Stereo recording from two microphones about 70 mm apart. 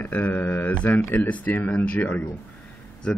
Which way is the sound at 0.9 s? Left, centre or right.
Left.